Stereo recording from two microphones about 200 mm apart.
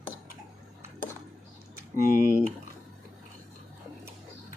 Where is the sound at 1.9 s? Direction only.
45° right (ahead or behind).